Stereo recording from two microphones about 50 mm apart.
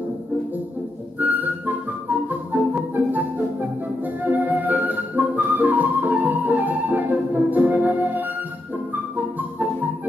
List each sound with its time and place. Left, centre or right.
1.2 s music: right
4.0 s flute: right
8.9 s music: right